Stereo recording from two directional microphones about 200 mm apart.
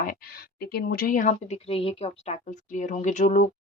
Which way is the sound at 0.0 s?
45° left (ahead or behind).